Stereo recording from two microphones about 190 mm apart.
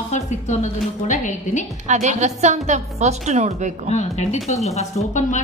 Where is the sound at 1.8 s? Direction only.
40° right (ahead or behind).